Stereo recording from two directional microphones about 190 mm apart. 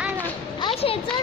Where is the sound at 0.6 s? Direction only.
30° left (ahead or behind).